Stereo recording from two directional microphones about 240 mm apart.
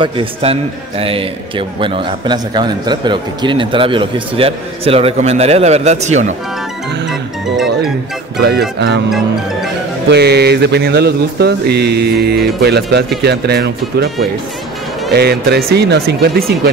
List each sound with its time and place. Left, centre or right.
0.0 s a man's voice: right
8.4 s mantra: right
10.1 s mantra: right
15.1 s mantra: right